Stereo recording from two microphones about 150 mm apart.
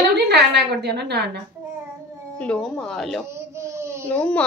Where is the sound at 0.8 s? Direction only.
90° right.